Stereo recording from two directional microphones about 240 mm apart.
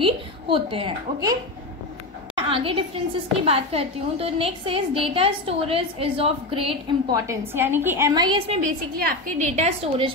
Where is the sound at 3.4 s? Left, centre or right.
Right.